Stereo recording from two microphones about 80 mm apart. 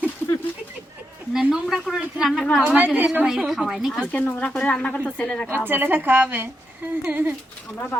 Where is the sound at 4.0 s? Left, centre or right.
Centre.